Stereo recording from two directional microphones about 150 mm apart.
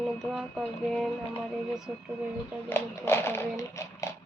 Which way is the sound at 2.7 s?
15° left (ahead or behind).